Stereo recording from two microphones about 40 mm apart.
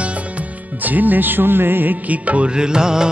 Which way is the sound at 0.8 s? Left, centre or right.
Right.